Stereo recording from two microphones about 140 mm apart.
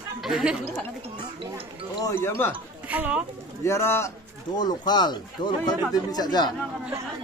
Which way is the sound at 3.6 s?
20° left (ahead or behind).